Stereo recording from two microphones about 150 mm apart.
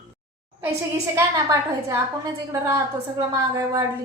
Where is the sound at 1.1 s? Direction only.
20° right (ahead or behind).